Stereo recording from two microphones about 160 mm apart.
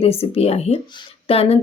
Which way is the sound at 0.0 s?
40° left (ahead or behind).